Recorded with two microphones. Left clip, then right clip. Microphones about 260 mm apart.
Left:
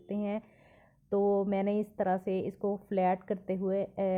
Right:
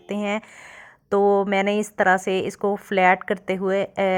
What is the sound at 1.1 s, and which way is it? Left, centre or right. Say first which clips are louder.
Speech: right 10 dB; right.